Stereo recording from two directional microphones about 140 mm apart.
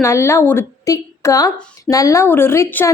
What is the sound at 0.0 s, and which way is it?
A woman's voice, 20° left (ahead or behind).